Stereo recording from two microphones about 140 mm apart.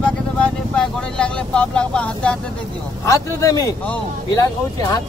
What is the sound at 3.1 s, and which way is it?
Speech, 25° left (ahead or behind).